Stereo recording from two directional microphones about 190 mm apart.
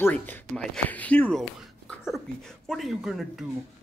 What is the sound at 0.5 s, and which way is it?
Speech, 5° left (ahead or behind).